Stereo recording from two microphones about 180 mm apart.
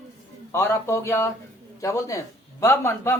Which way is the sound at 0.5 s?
15° left (ahead or behind).